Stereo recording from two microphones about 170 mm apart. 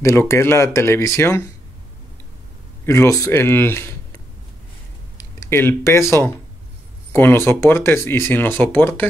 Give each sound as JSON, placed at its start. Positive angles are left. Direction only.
{"t": 0.0, "sound": "speech", "side_deg": 15}
{"t": 2.8, "sound": "speech", "side_deg": 15}